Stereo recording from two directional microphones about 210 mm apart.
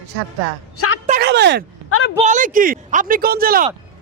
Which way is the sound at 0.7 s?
90° left.